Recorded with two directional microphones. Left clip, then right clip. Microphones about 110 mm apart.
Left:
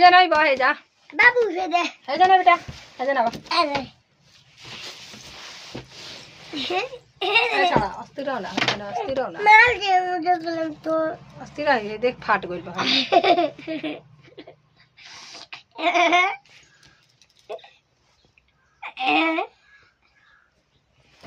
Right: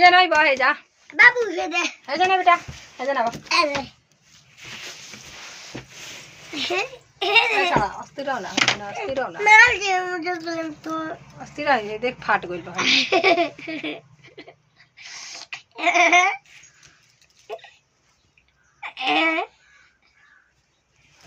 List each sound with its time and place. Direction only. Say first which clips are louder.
0.0 s a woman's voice: even; 5° right (ahead or behind)
1.0 s a child's voice: right 2 dB; 20° left (ahead or behind)
2.0 s a woman's voice: left 2 dB; 5° right (ahead or behind)
3.5 s a child's voice: right 4 dB; 30° left (ahead or behind)
6.5 s speech: right 1 dB; 35° left (ahead or behind)
7.5 s a woman's voice: even; 15° right (ahead or behind)
9.4 s a child's voice: right 1 dB; 50° left (ahead or behind)
11.4 s a woman's voice: even; 20° right (ahead or behind)
12.7 s speech: even; 80° left; by 13.7 s 60° left (ahead or behind)
13.7 s a sound: even; 45° left (ahead or behind)
18.8 s a sound: even; 35° left (ahead or behind)